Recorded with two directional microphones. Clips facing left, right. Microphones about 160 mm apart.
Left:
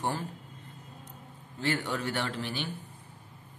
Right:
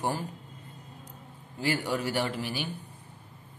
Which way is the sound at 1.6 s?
10° right (ahead or behind).